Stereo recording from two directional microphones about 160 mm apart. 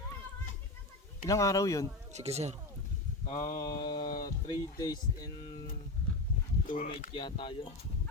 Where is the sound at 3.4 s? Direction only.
60° left (ahead or behind).